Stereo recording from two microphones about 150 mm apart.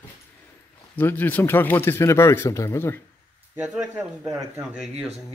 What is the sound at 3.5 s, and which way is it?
Speech, 5° right (ahead or behind).